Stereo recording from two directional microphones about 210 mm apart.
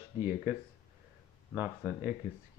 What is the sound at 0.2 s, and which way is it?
Speech, 10° right (ahead or behind).